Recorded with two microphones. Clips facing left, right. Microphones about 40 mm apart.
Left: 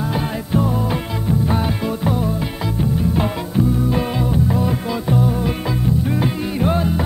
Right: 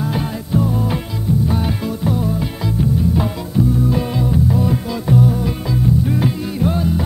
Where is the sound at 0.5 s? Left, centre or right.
Left.